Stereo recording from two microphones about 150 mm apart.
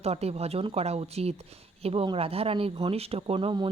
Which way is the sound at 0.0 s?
45° right (ahead or behind).